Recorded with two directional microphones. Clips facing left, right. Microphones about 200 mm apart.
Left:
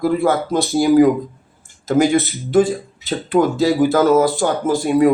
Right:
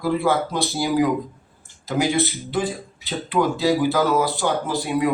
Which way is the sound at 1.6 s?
50° left (ahead or behind).